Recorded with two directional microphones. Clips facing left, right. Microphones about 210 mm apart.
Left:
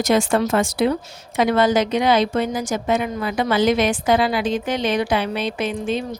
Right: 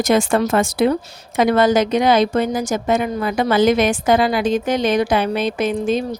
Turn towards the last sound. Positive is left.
turn(degrees=-40)  # may be behind; listen again after turning